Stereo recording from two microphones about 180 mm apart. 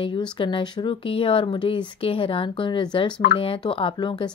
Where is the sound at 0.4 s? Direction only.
25° left (ahead or behind).